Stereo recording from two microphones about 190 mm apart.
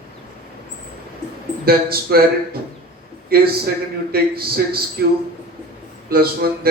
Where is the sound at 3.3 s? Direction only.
55° right (ahead or behind).